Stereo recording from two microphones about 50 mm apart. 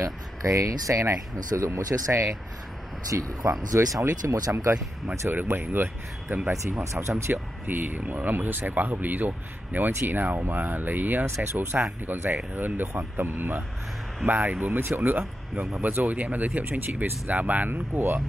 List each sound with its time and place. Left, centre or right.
0.0 s speech: right
3.2 s speech: right
5.3 s speech: right
6.5 s speech: right
7.6 s speech: right
17.6 s speech: right